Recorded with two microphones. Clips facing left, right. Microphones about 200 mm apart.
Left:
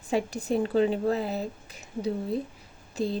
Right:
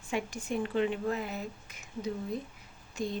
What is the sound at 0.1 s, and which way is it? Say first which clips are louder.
A woman's voice: left 7 dB; 35° left (ahead or behind).